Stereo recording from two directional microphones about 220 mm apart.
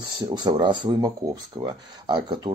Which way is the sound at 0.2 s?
20° right (ahead or behind).